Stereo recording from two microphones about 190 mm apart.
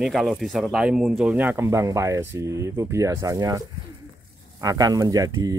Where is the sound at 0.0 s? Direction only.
Centre (ahead or behind).